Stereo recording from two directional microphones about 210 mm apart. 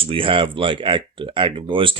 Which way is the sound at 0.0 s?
25° right (ahead or behind).